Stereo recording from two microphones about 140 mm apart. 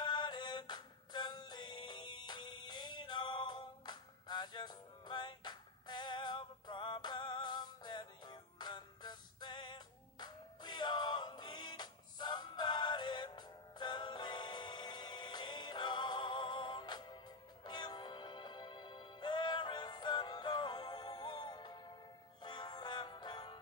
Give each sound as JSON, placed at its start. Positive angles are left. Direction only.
{"t": 0.0, "sound": "music", "side_deg": 30}